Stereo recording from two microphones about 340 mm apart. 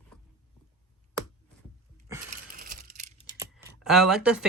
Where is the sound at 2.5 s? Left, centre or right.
Right.